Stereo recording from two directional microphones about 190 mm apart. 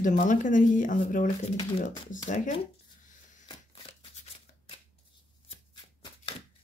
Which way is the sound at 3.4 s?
30° left (ahead or behind).